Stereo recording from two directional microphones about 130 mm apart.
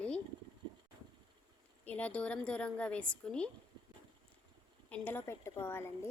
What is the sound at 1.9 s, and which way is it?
A woman's voice, 10° left (ahead or behind).